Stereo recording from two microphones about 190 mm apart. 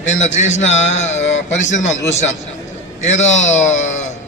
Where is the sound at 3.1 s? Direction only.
40° left (ahead or behind).